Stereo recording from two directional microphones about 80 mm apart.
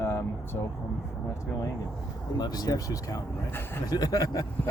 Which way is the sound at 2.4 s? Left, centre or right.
Left.